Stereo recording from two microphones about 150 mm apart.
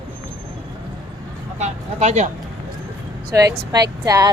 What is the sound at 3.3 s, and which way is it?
Speech, 20° right (ahead or behind).